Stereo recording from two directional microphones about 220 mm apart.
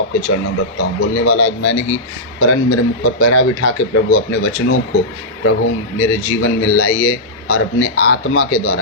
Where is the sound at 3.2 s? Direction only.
70° left (ahead or behind).